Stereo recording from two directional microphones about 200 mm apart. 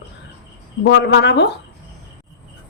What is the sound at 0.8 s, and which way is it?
Speech, 60° left (ahead or behind).